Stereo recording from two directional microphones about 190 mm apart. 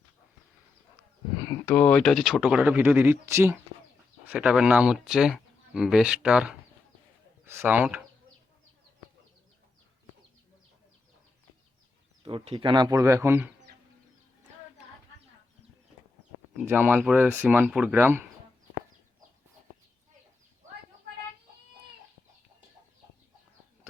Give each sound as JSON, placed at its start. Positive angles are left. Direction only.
{"t": 1.6, "sound": "speech", "side_deg": 10}
{"t": 12.2, "sound": "speech", "side_deg": -30}
{"t": 16.6, "sound": "speech", "side_deg": -10}